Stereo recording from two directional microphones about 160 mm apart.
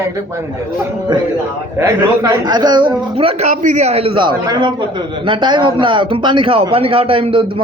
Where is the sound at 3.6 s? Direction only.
45° right (ahead or behind).